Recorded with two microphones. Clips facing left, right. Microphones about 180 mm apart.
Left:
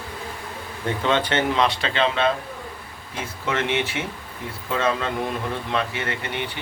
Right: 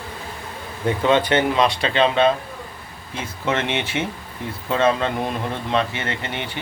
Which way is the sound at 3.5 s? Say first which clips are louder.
Right 1 dB; 20° right (ahead or behind).